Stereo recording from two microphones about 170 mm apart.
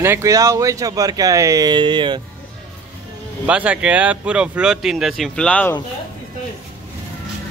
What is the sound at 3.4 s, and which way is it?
Speech, 5° right (ahead or behind).